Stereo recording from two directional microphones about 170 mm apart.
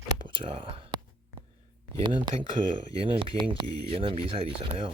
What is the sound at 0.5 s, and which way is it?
Speech, 30° right (ahead or behind).